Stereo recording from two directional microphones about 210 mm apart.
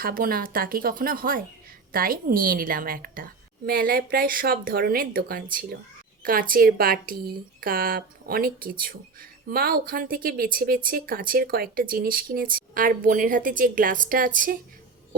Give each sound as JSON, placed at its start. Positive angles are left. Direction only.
{"t": 0.0, "sound": "speech", "side_deg": -45}